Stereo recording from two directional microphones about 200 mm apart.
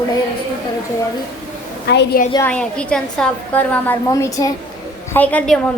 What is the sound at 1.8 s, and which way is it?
Speech, 55° left (ahead or behind).